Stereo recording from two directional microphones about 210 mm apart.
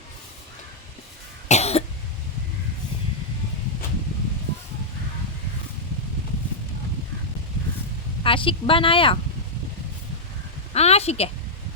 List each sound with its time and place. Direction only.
1.5 s cough: 30° left (ahead or behind)
8.2 s speech: 25° left (ahead or behind)
10.8 s a woman's voice: 30° left (ahead or behind)